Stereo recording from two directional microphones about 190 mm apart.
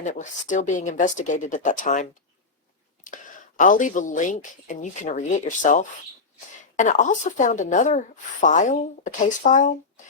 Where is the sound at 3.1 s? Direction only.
45° left (ahead or behind).